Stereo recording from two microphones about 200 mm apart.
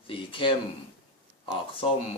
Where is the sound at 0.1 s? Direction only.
25° left (ahead or behind).